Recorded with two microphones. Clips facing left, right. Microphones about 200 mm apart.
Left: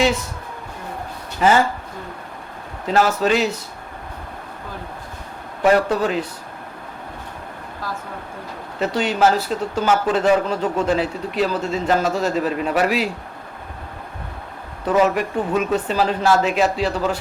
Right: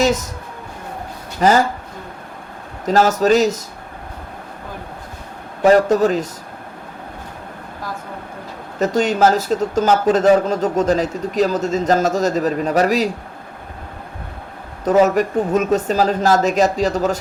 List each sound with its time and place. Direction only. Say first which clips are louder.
0.0 s speech: right 2 dB; 40° right (ahead or behind)
1.4 s speech: right 2 dB; 40° right (ahead or behind)
2.8 s speech: right 3 dB; 40° right (ahead or behind)
5.6 s speech: right 4 dB; 40° right (ahead or behind)
8.8 s speech: right 3 dB; 45° right (ahead or behind)
14.8 s speech: right 4 dB; 40° right (ahead or behind)